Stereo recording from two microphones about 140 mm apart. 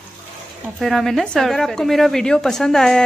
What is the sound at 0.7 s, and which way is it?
A woman's voice, centre (ahead or behind).